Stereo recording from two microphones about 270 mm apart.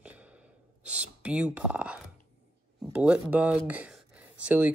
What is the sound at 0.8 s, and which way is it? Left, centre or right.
Speech, centre.